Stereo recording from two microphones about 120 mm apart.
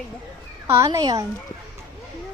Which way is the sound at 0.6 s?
25° right (ahead or behind).